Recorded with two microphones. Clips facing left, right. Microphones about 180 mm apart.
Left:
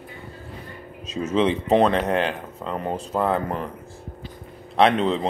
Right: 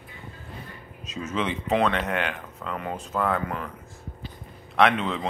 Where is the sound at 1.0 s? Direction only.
30° left (ahead or behind).